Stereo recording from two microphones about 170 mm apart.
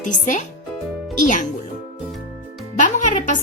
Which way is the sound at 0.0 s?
50° left (ahead or behind).